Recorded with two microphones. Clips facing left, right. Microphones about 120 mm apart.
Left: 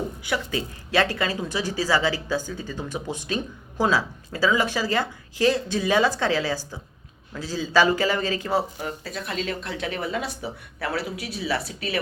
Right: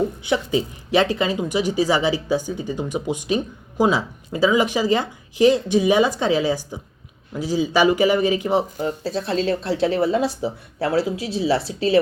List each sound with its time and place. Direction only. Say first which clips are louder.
0.3 s speech: right 4 dB; 20° right (ahead or behind)
9.0 s speech: right 9 dB; 30° right (ahead or behind)